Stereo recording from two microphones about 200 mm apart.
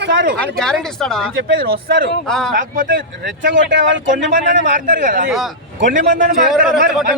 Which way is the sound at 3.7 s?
65° right (ahead or behind).